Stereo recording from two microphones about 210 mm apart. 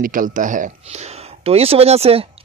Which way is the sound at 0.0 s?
40° right (ahead or behind).